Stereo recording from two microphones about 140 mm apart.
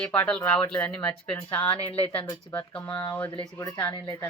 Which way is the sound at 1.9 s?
40° left (ahead or behind).